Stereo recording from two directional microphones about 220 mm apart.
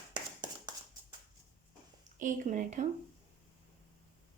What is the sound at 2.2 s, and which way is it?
Speech, 35° right (ahead or behind).